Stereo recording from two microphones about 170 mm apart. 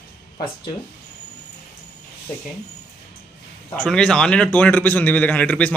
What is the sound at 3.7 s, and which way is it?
A man's voice, 5° left (ahead or behind).